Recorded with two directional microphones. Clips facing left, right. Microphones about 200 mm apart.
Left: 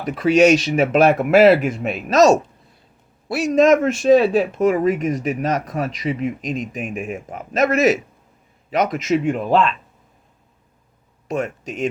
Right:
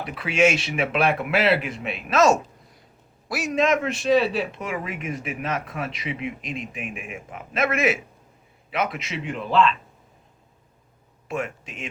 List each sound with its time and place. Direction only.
0.0 s speech: 40° left (ahead or behind)
11.3 s speech: 40° left (ahead or behind)